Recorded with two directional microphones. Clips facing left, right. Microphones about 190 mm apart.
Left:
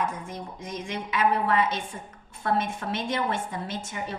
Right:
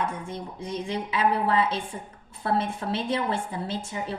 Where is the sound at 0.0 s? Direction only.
30° right (ahead or behind).